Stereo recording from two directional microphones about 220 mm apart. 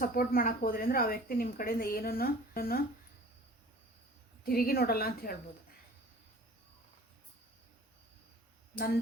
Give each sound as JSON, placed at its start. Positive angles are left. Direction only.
{"t": 0.0, "sound": "speech", "side_deg": 40}
{"t": 4.4, "sound": "a woman's voice", "side_deg": 45}
{"t": 8.7, "sound": "speech", "side_deg": 45}